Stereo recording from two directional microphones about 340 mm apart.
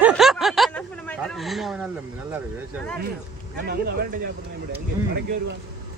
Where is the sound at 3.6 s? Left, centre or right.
Right.